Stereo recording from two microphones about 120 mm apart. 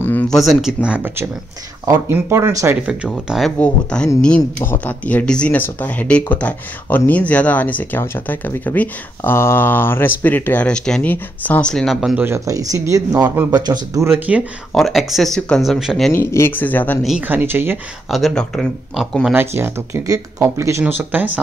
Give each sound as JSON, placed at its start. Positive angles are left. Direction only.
{"t": 0.0, "sound": "a sound", "side_deg": 15}
{"t": 0.4, "sound": "speech", "side_deg": 0}
{"t": 0.8, "sound": "speech", "side_deg": -15}
{"t": 2.9, "sound": "speech", "side_deg": -5}
{"t": 3.5, "sound": "speech", "side_deg": 10}
{"t": 12.2, "sound": "speech", "side_deg": -25}
{"t": 13.9, "sound": "speech", "side_deg": -20}
{"t": 14.7, "sound": "speech", "side_deg": 0}
{"t": 16.1, "sound": "speech", "side_deg": 20}
{"t": 17.2, "sound": "speech", "side_deg": -15}
{"t": 18.1, "sound": "speech", "side_deg": 5}
{"t": 19.3, "sound": "speech", "side_deg": -20}
{"t": 20.8, "sound": "speech", "side_deg": -15}